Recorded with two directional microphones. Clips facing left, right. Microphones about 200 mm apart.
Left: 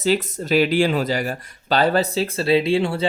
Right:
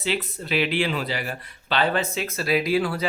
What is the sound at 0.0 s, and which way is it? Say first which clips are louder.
Speech: left 7 dB; 40° left (ahead or behind).